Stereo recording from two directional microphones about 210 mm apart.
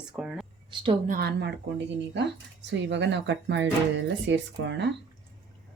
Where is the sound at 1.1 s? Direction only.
50° right (ahead or behind).